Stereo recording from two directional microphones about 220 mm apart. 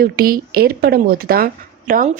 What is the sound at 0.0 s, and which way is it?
Speech, 40° right (ahead or behind).